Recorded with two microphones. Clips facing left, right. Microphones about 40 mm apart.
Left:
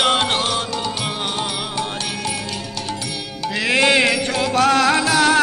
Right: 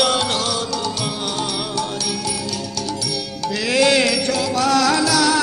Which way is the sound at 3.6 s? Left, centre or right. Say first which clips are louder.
Left 1 dB; left.